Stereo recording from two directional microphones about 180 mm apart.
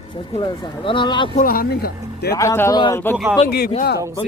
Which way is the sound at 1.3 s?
50° left (ahead or behind).